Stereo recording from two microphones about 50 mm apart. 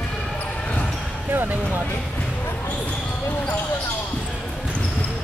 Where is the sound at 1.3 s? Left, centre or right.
Right.